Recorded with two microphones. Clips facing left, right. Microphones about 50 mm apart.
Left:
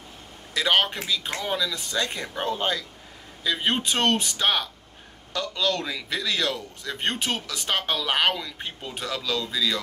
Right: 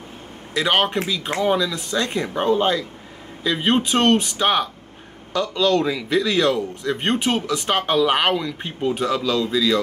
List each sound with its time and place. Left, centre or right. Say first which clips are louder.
0.6 s speech: right 4 dB; centre